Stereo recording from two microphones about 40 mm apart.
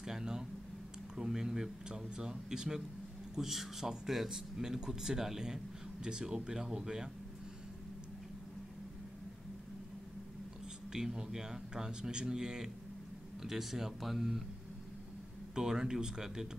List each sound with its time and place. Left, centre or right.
0.0 s a sound: centre
1.1 s speech: centre
3.3 s speech: centre
10.9 s speech: centre
15.5 s speech: centre